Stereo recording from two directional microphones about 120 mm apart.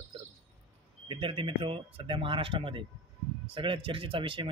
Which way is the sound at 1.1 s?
45° right (ahead or behind).